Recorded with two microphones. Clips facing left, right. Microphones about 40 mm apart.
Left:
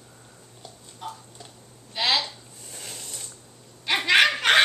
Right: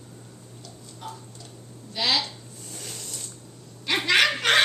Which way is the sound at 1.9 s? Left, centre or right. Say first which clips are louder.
Left 1 dB; centre.